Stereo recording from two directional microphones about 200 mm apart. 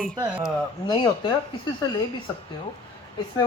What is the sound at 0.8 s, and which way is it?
Speech, 20° left (ahead or behind).